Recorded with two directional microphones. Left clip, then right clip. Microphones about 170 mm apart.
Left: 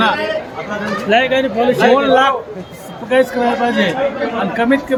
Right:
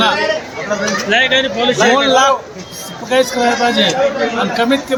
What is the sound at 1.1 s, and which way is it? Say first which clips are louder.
Speech: even; 40° left (ahead or behind).